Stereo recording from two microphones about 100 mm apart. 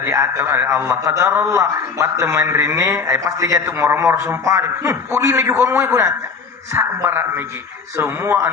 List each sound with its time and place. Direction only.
0.0 s a man's voice: 30° right (ahead or behind)